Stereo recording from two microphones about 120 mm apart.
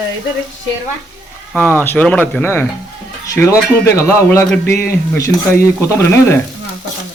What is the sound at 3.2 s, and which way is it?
Speech, 25° left (ahead or behind).